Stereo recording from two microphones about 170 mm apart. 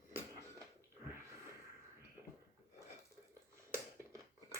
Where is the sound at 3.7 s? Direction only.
15° right (ahead or behind).